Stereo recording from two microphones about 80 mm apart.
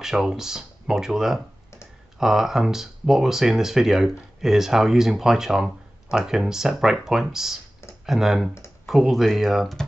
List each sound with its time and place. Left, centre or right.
0.0 s speech: centre